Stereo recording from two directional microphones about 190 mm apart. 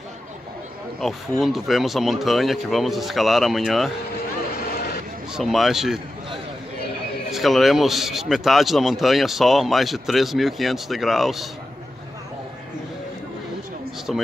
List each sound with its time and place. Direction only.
1.4 s speech: centre (ahead or behind)
4.7 s a sound: 55° left (ahead or behind)
5.3 s speech: centre (ahead or behind)
7.2 s speech: centre (ahead or behind)
14.1 s speech: centre (ahead or behind)